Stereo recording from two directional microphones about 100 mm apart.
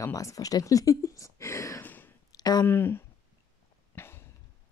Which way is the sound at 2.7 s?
20° left (ahead or behind).